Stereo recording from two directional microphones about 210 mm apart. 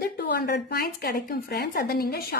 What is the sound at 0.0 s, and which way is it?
Speech, 50° left (ahead or behind).